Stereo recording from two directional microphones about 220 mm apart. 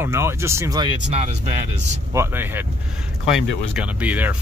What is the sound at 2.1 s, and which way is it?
Speech, 10° right (ahead or behind).